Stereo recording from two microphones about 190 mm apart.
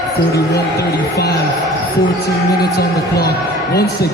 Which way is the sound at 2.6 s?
55° left (ahead or behind).